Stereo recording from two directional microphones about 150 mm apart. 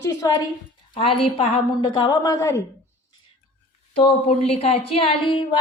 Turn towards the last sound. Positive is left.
turn(degrees=35)  # may be behind; listen again after turning